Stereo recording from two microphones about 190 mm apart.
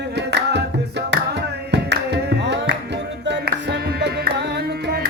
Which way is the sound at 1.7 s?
65° right (ahead or behind).